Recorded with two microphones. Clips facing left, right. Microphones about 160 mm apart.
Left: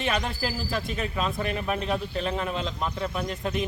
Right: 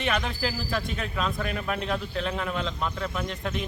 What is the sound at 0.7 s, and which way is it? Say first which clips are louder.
A man's voice: left 1 dB; 20° left (ahead or behind).